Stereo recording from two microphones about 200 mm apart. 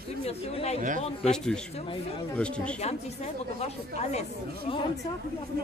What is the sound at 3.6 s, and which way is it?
Speech, 35° left (ahead or behind).